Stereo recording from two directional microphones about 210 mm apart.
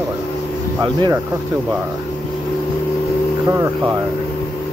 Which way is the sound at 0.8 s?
20° right (ahead or behind).